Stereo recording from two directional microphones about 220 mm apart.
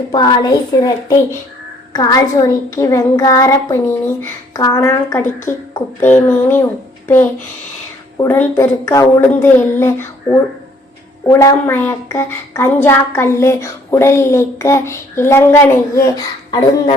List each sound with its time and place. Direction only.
0.1 s a woman's voice: 20° left (ahead or behind)
8.2 s a woman's voice: 10° left (ahead or behind)
11.3 s a woman's voice: 15° left (ahead or behind)